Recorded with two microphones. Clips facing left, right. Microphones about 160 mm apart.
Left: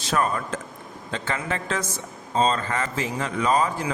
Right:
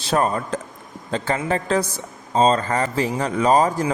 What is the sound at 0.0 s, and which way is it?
A man's voice, 30° right (ahead or behind).